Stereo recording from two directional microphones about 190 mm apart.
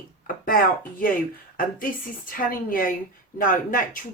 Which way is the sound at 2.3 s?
45° left (ahead or behind).